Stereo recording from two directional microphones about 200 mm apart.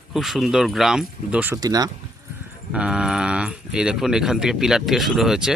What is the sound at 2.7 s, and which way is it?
Speech, 5° right (ahead or behind).